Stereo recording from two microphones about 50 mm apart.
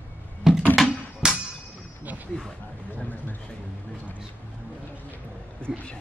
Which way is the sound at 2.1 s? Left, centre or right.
Right.